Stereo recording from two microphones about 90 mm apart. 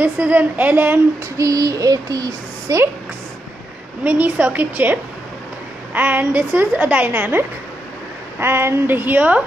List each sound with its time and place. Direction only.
0.0 s a woman's voice: 15° right (ahead or behind)
1.3 s a woman's voice: 40° right (ahead or behind)
4.0 s a woman's voice: 15° right (ahead or behind)
5.9 s a woman's voice: 20° right (ahead or behind)